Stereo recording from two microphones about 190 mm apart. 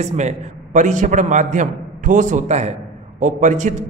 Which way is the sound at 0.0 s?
35° right (ahead or behind).